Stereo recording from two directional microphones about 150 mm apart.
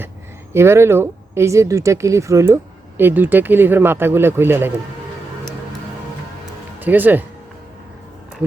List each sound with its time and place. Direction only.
0.5 s speech: 15° right (ahead or behind)
6.7 s speech: 10° right (ahead or behind)